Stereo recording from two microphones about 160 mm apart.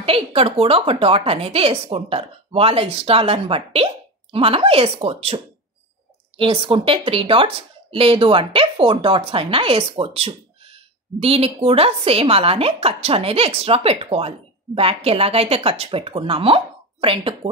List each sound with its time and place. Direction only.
0.0 s a woman's voice: 35° right (ahead or behind)